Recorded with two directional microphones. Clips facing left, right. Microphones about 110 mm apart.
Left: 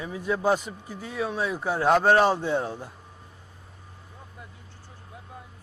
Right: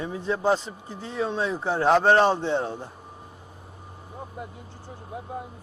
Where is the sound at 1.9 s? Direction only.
5° left (ahead or behind).